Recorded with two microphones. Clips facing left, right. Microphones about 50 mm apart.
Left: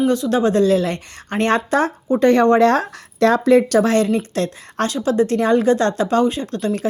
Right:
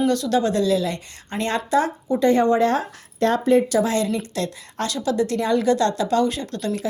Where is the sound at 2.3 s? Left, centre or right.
Left.